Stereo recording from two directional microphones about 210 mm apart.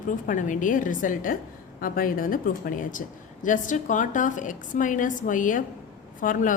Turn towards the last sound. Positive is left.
turn(degrees=40)  # may be behind; listen again after turning